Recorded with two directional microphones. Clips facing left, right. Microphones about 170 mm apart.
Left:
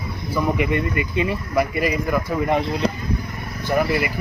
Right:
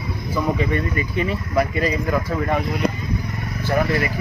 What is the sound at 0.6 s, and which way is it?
Speech, 15° left (ahead or behind).